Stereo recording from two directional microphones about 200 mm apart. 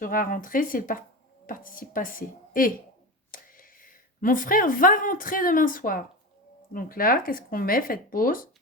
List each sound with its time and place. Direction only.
0.0 s speech: 45° left (ahead or behind)